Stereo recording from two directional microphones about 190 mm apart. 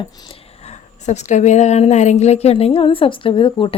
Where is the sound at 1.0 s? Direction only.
40° left (ahead or behind).